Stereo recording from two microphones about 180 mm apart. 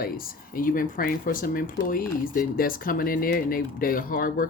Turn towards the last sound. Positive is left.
turn(degrees=50)  # may be behind; listen again after turning